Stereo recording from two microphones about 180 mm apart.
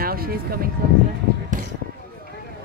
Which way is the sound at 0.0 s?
55° right (ahead or behind).